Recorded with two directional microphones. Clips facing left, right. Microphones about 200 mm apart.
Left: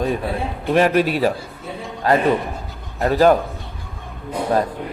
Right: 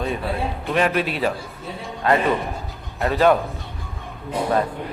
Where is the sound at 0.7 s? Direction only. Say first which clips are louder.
Left 6 dB; 40° left (ahead or behind).